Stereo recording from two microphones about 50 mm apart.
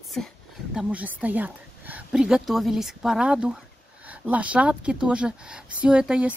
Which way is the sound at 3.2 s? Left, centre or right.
Centre.